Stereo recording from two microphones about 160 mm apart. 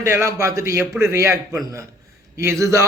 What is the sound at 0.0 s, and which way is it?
Speech, 15° right (ahead or behind).